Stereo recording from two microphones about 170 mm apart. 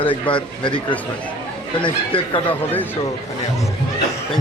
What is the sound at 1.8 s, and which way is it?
Speech, 30° left (ahead or behind).